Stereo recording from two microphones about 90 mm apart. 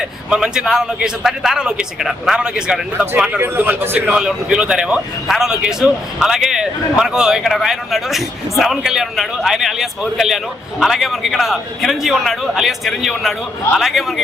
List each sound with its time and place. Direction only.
0.3 s a man's voice: 5° right (ahead or behind)
3.2 s a man's voice: 20° right (ahead or behind)
4.1 s a man's voice: 5° right (ahead or behind)